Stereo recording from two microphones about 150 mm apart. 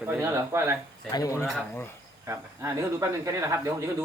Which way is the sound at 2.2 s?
20° right (ahead or behind).